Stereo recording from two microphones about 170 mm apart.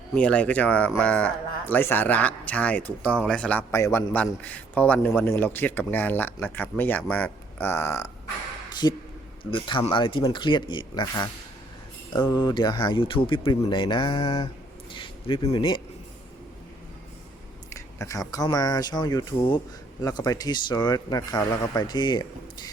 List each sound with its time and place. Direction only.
0.1 s a man's voice: 5° left (ahead or behind)
3.7 s a man's voice: 20° left (ahead or behind)
17.7 s speech: 20° left (ahead or behind)